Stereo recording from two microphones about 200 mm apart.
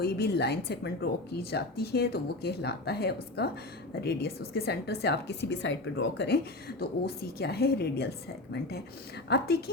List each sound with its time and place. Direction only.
0.0 s a woman's voice: 55° left (ahead or behind)
9.3 s a woman's voice: 50° left (ahead or behind)